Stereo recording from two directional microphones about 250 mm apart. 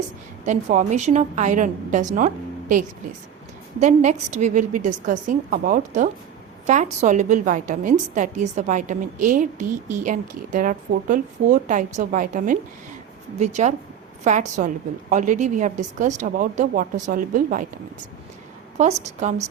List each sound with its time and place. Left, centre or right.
0.4 s a woman's voice: right
18.8 s a woman's voice: right